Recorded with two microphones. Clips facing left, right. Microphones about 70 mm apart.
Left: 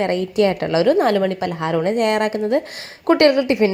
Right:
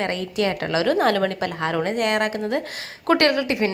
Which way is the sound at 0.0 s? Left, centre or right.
Left.